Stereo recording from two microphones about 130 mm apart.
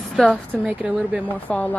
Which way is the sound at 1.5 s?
10° left (ahead or behind).